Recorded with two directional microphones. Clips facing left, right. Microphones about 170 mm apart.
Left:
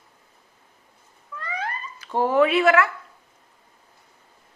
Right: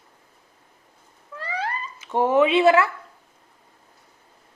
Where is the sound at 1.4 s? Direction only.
30° right (ahead or behind).